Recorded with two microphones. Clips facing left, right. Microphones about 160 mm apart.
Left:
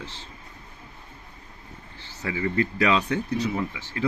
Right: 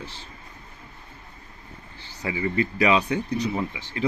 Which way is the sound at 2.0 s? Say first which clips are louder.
Right 1 dB; 15° right (ahead or behind).